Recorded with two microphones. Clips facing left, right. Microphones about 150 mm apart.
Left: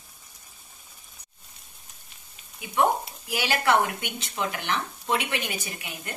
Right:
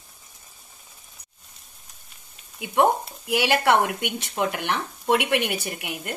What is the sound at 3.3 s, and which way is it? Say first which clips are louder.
Speech: right 4 dB; 65° right (ahead or behind).